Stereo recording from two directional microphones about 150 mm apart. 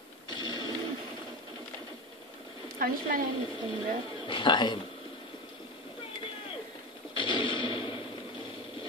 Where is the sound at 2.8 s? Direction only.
70° right (ahead or behind).